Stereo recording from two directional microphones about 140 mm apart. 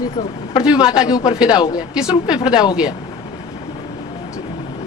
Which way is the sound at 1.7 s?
5° right (ahead or behind).